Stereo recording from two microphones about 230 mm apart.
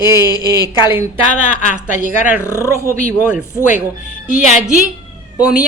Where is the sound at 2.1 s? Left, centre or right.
Centre.